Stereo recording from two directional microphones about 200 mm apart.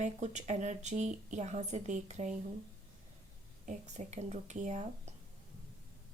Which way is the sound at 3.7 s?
35° right (ahead or behind).